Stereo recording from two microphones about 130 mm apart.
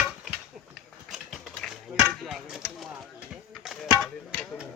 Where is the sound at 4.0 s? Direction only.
5° left (ahead or behind).